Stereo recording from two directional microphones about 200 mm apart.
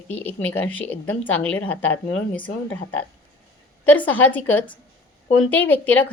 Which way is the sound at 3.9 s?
10° left (ahead or behind).